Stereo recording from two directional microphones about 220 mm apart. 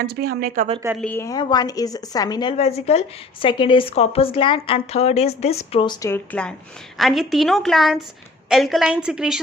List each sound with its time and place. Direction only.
0.0 s speech: 45° right (ahead or behind)
1.0 s a woman's voice: 10° left (ahead or behind)